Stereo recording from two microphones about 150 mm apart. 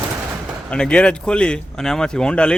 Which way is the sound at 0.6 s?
5° left (ahead or behind).